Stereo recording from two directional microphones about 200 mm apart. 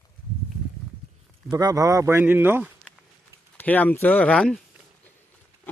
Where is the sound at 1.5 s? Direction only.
20° right (ahead or behind).